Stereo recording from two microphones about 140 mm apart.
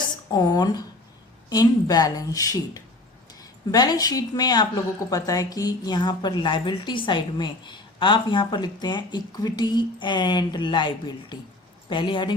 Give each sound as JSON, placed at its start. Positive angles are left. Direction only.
{"t": 0.3, "sound": "a woman's voice", "side_deg": 30}